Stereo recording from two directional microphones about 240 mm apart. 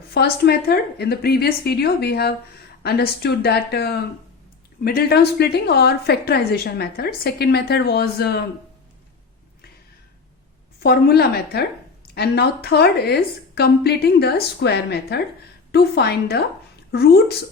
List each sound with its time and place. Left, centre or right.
0.1 s a woman's voice: left
10.8 s a woman's voice: left